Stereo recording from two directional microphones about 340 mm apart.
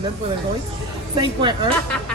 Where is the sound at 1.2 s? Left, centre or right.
Centre.